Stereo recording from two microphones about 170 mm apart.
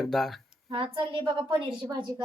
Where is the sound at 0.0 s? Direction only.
Centre (ahead or behind).